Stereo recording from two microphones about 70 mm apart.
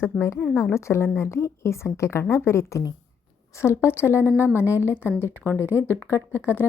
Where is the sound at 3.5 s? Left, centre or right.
Left.